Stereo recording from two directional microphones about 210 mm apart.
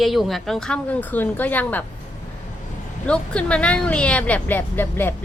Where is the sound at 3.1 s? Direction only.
5° left (ahead or behind).